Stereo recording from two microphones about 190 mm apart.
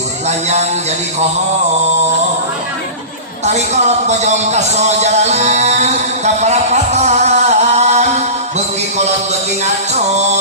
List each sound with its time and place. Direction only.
0.3 s a man's voice: 35° right (ahead or behind)
3.4 s a man's voice: 35° right (ahead or behind)
10.1 s a man's voice: 35° right (ahead or behind)